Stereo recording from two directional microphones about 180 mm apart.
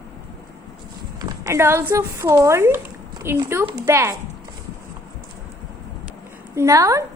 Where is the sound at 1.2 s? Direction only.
20° right (ahead or behind).